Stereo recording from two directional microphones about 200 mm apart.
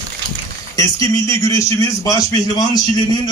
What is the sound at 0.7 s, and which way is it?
Speech, 15° left (ahead or behind).